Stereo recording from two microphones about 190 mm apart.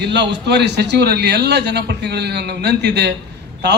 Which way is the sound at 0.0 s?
65° right (ahead or behind).